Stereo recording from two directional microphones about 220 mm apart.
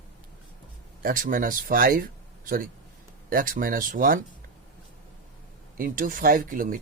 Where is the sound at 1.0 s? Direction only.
40° right (ahead or behind).